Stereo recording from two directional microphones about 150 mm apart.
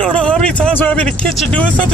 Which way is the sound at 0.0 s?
5° left (ahead or behind).